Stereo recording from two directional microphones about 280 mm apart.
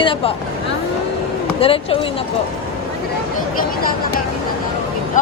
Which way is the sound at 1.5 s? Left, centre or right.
Centre.